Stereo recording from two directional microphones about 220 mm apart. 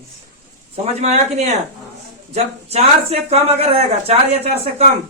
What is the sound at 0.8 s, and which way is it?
Speech, 30° right (ahead or behind).